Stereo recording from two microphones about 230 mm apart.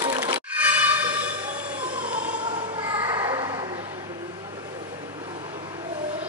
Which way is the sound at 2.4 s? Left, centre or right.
Right.